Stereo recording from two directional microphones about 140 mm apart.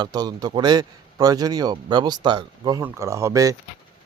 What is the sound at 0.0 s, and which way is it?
A man's voice, 30° right (ahead or behind).